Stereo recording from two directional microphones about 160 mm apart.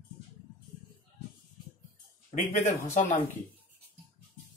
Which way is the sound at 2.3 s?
50° left (ahead or behind).